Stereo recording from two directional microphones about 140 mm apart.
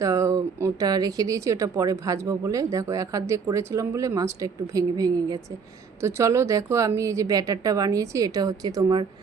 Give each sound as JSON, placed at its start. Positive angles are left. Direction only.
{"t": 0.0, "sound": "speech", "side_deg": -20}